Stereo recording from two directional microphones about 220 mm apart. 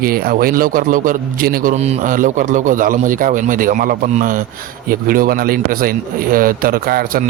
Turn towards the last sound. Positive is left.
turn(degrees=-40)  # may be behind; listen again after turning